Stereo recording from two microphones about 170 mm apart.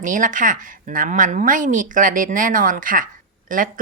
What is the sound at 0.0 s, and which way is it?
Speech, 50° right (ahead or behind).